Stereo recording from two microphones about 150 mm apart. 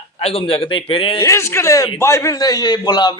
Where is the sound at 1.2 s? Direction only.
20° left (ahead or behind).